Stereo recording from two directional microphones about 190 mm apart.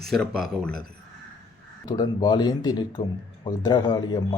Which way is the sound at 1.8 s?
20° left (ahead or behind).